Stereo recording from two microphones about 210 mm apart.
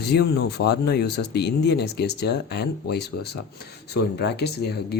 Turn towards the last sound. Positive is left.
turn(degrees=50)  # may be behind; listen again after turning